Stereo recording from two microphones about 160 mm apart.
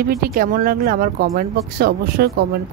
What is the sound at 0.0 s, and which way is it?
Speech, 70° right (ahead or behind).